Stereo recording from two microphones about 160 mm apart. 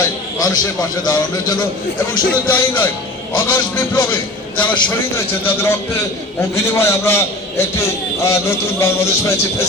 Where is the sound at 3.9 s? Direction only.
25° left (ahead or behind).